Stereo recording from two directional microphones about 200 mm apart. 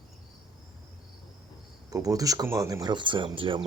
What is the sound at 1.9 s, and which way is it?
Speech, 15° right (ahead or behind).